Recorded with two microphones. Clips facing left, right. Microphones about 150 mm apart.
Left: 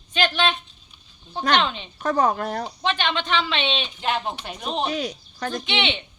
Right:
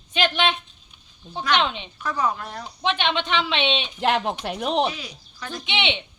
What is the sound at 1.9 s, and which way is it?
Speech, 45° left (ahead or behind).